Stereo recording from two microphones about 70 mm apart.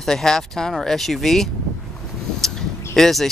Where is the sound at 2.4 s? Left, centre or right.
Centre.